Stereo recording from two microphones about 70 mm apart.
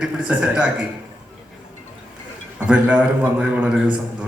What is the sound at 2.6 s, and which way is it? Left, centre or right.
A man's voice, centre.